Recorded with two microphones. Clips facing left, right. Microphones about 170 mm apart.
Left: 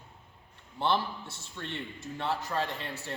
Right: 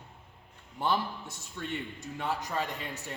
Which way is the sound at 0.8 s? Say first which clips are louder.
Left 1 dB; 15° right (ahead or behind).